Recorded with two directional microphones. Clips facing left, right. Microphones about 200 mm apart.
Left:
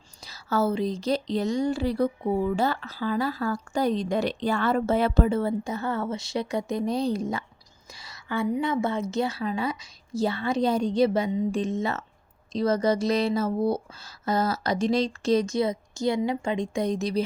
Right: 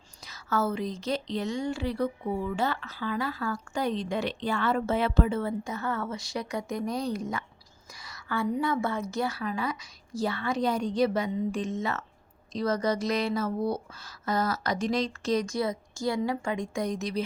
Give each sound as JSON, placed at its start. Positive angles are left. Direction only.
{"t": 0.3, "sound": "a woman's voice", "side_deg": 30}
{"t": 7.9, "sound": "whispering", "side_deg": 25}
{"t": 8.6, "sound": "speech", "side_deg": 20}